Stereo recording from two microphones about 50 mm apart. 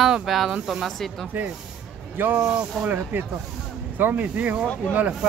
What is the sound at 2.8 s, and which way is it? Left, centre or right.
Speech, right.